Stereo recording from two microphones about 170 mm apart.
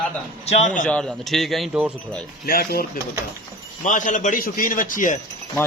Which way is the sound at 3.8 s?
50° left (ahead or behind).